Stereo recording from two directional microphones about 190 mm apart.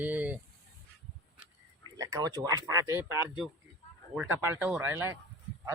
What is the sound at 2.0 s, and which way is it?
Speech, 20° right (ahead or behind).